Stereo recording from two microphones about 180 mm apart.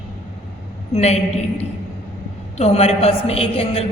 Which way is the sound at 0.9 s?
35° left (ahead or behind).